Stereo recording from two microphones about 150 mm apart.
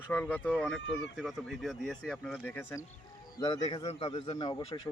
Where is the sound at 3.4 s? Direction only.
30° left (ahead or behind).